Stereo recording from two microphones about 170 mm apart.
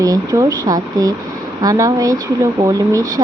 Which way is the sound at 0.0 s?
20° right (ahead or behind).